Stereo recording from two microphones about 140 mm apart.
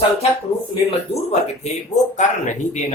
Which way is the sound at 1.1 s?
50° left (ahead or behind).